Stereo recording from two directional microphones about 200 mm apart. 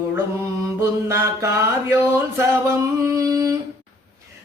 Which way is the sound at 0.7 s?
15° right (ahead or behind).